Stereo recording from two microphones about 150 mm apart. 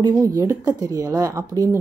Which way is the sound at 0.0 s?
20° right (ahead or behind).